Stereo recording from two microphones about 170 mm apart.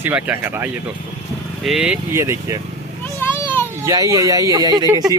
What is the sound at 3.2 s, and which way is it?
Children playing, 10° left (ahead or behind).